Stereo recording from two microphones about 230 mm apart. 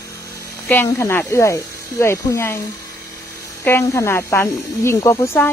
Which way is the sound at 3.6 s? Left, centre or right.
Centre.